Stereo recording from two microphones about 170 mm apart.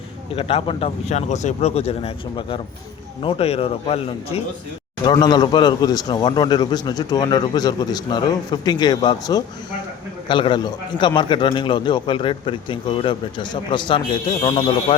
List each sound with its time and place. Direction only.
0.3 s speech: 35° left (ahead or behind)
5.0 s a man's voice: 25° left (ahead or behind)